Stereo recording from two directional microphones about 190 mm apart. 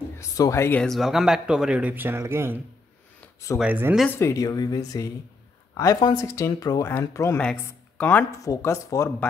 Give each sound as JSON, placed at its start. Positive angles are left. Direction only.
{"t": 0.2, "sound": "speech", "side_deg": 15}
{"t": 4.0, "sound": "speech", "side_deg": 10}